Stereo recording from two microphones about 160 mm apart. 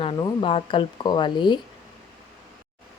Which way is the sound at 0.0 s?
30° left (ahead or behind).